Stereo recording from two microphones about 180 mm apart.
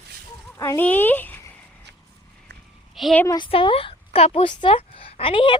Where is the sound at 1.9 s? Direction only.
75° right (ahead or behind).